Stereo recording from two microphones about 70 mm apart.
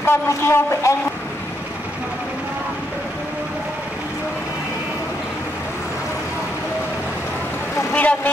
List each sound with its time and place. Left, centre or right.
0.0 s speech: left
7.9 s speech: centre